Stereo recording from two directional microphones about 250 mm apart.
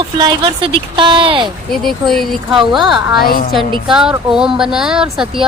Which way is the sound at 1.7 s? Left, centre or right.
Centre.